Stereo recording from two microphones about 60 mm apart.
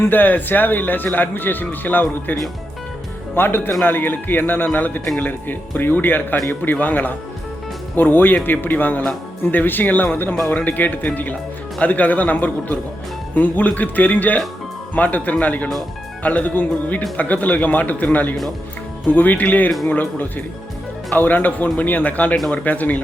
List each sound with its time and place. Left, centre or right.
0.0 s a man's voice: left